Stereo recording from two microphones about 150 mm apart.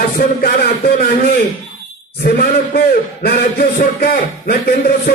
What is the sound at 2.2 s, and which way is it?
Speech, 90° left.